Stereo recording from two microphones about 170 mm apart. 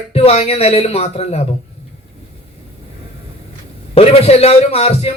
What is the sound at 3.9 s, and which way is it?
Speech, 35° left (ahead or behind).